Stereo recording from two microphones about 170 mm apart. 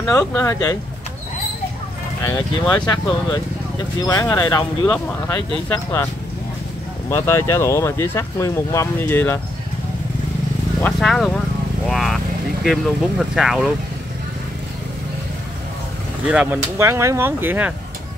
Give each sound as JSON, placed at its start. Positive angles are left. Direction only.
{"t": 0.2, "sound": "speech", "side_deg": 15}
{"t": 2.2, "sound": "speech", "side_deg": 20}
{"t": 7.1, "sound": "speech", "side_deg": 15}
{"t": 10.8, "sound": "speech", "side_deg": 0}
{"t": 11.9, "sound": "vehicle", "side_deg": 0}
{"t": 12.6, "sound": "speech", "side_deg": 0}
{"t": 16.3, "sound": "speech", "side_deg": -10}